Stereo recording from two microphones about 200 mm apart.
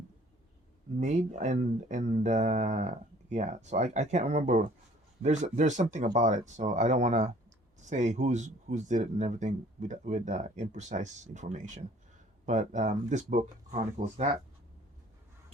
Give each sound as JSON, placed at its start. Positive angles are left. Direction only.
{"t": 0.9, "sound": "speech", "side_deg": -35}